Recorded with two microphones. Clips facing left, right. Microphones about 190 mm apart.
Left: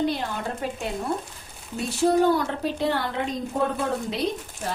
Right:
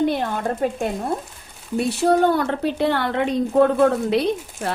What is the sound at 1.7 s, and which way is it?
A woman's voice, 65° right (ahead or behind).